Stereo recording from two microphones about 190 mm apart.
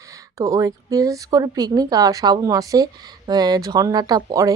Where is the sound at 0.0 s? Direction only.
20° right (ahead or behind).